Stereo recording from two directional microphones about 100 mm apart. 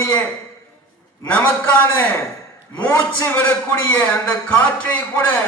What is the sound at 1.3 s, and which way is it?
A man's voice, 20° left (ahead or behind).